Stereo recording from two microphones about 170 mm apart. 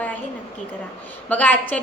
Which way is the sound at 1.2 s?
10° left (ahead or behind).